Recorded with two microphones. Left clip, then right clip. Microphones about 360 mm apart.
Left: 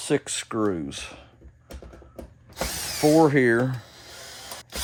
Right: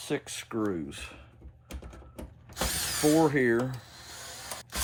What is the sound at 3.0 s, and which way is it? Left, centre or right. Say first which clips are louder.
Speech: left 6 dB; left.